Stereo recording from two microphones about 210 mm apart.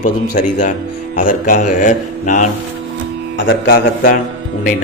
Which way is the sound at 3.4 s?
50° left (ahead or behind).